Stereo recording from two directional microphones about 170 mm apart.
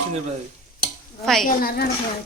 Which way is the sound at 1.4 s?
60° left (ahead or behind).